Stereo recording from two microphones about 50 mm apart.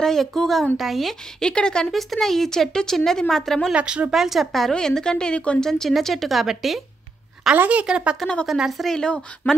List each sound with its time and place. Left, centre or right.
0.0 s speech: centre
1.4 s a woman's voice: centre
1.9 s a woman's voice: centre
3.7 s speech: right
4.1 s a woman's voice: centre; by 5.6 s left
5.6 s a woman's voice: centre
7.5 s a woman's voice: right
7.8 s speech: centre
8.5 s speech: centre
8.8 s a woman's voice: centre